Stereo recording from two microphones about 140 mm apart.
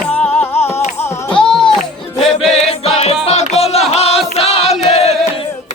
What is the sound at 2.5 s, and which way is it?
Music, 45° left (ahead or behind).